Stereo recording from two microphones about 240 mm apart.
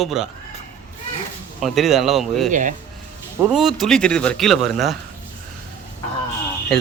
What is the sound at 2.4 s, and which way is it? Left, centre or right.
Speech, right.